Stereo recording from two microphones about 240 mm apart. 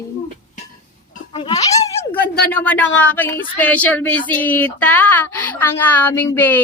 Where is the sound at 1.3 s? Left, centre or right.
Left.